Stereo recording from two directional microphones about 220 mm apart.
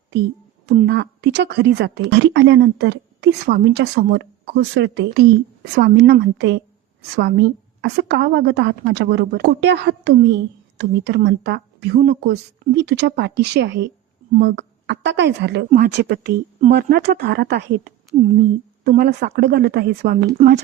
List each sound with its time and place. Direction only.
0.9 s a woman's voice: 50° right (ahead or behind)